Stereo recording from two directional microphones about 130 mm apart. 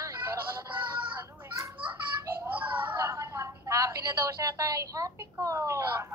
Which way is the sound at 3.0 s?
20° right (ahead or behind).